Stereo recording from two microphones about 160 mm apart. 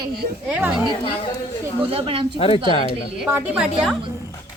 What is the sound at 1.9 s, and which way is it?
Speech, 35° right (ahead or behind).